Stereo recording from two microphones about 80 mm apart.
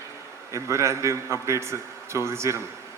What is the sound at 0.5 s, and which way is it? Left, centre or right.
A man's voice, right.